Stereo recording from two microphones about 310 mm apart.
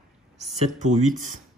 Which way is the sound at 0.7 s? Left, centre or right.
Right.